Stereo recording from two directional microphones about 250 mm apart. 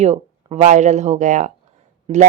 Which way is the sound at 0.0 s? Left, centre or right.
Right.